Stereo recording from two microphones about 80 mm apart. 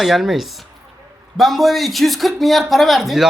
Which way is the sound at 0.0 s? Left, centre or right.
Centre.